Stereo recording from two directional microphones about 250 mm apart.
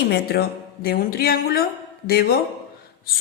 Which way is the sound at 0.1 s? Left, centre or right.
Left.